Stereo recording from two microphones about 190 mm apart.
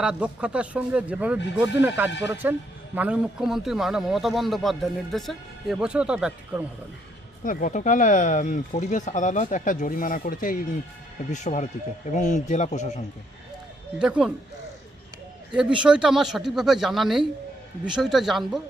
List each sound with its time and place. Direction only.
0.0 s a man's voice: 5° right (ahead or behind)
7.4 s speech: 45° left (ahead or behind)
14.0 s a man's voice: 5° right (ahead or behind)
15.5 s a man's voice: 5° right (ahead or behind)